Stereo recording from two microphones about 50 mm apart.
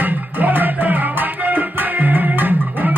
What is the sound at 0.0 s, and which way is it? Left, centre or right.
Music, right.